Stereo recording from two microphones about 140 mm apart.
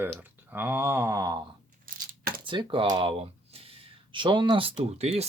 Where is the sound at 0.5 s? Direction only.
15° right (ahead or behind).